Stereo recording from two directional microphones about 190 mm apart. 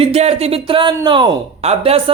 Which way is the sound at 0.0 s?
35° right (ahead or behind).